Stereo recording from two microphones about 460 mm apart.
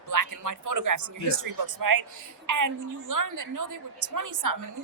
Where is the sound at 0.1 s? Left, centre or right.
Right.